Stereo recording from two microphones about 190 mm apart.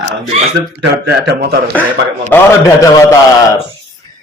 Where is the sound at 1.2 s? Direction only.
60° right (ahead or behind).